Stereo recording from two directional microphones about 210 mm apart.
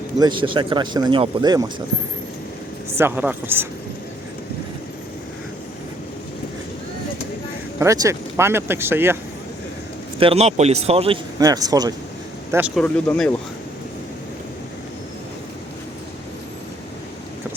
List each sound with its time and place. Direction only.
0.2 s speech: 20° right (ahead or behind)
3.0 s speech: 10° right (ahead or behind)
7.8 s speech: 15° right (ahead or behind)
10.2 s speech: 30° right (ahead or behind)
11.3 s speech: 15° right (ahead or behind)
12.7 s speech: 5° left (ahead or behind)